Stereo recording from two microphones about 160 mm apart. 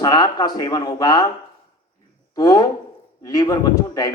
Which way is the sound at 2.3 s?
25° left (ahead or behind).